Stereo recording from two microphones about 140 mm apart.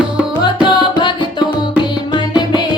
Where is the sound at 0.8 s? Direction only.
35° left (ahead or behind).